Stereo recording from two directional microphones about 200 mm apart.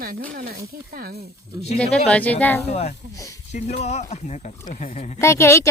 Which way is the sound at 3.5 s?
35° left (ahead or behind).